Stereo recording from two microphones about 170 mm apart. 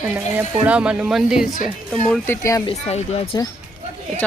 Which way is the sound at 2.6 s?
35° left (ahead or behind).